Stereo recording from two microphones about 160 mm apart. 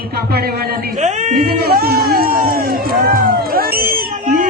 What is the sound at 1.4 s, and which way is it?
Speech, 75° right (ahead or behind).